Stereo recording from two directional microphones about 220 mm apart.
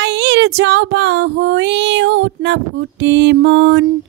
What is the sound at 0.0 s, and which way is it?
Speech, 50° right (ahead or behind).